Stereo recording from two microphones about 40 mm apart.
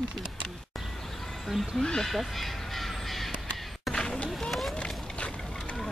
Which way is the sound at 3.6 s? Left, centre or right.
Centre.